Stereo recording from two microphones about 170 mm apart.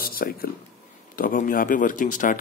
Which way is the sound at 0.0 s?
60° left (ahead or behind).